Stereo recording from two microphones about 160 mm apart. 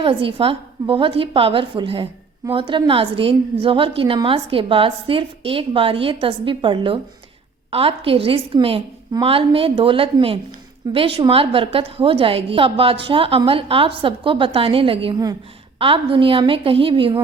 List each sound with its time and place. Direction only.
0.0 s a woman's voice: 35° right (ahead or behind)